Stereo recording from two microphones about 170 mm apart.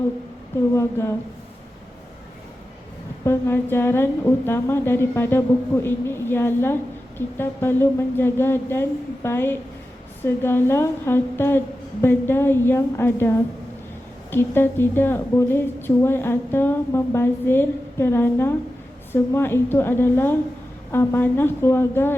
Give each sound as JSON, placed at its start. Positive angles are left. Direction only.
{"t": 0.7, "sound": "a woman's voice", "side_deg": 15}
{"t": 3.2, "sound": "a woman's voice", "side_deg": 15}